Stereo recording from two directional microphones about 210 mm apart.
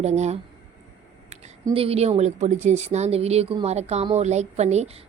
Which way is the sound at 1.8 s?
30° right (ahead or behind).